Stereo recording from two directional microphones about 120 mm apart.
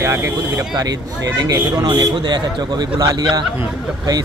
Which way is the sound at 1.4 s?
35° right (ahead or behind).